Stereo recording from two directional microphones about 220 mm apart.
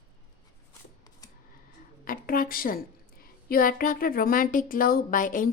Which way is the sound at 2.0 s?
40° left (ahead or behind).